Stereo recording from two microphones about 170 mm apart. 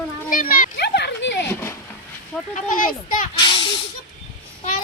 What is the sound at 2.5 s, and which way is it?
Speech, 50° left (ahead or behind).